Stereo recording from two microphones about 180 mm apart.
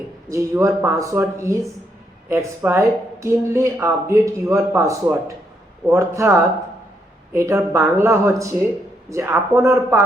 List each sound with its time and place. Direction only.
0.3 s speech: 15° right (ahead or behind)